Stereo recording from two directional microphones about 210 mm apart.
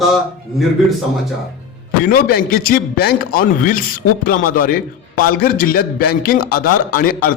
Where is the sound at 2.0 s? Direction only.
45° left (ahead or behind).